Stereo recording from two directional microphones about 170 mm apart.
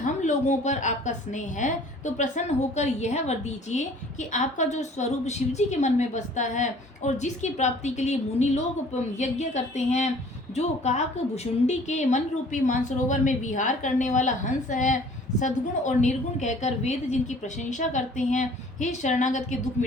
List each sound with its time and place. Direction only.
0.0 s a woman's voice: 45° left (ahead or behind)